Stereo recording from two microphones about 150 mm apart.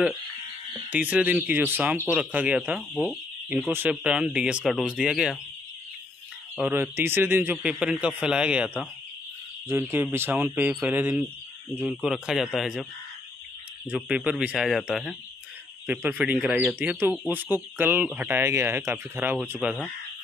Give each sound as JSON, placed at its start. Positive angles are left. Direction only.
{"t": 0.8, "sound": "speech", "side_deg": -10}
{"t": 6.5, "sound": "speech", "side_deg": -10}
{"t": 13.8, "sound": "speech", "side_deg": -5}
{"t": 15.9, "sound": "speech", "side_deg": -15}